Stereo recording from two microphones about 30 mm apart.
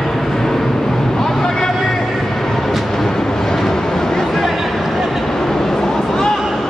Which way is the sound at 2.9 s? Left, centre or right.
Centre.